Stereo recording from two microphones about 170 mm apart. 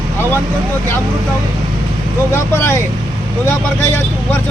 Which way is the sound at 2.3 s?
10° left (ahead or behind).